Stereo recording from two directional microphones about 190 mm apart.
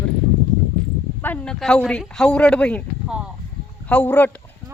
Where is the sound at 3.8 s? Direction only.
10° left (ahead or behind).